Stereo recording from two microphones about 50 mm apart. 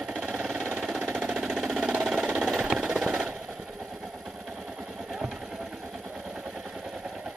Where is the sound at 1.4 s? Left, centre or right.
Centre.